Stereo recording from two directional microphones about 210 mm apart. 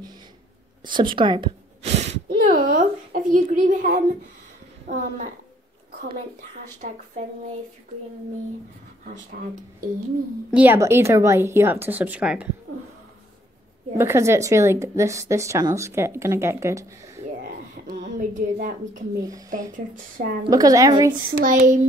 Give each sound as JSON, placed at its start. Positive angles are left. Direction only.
{"t": 0.8, "sound": "speech", "side_deg": -20}
{"t": 2.2, "sound": "a woman's voice", "side_deg": -40}
{"t": 9.0, "sound": "a woman's voice", "side_deg": -35}
{"t": 10.5, "sound": "speech", "side_deg": -10}
{"t": 13.9, "sound": "speech", "side_deg": -10}
{"t": 17.4, "sound": "a sound", "side_deg": -40}
{"t": 19.7, "sound": "a woman's voice", "side_deg": -40}
{"t": 20.4, "sound": "speech", "side_deg": -15}
{"t": 21.1, "sound": "a woman's voice", "side_deg": -40}